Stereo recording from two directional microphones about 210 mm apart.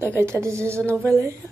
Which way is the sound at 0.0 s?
10° right (ahead or behind).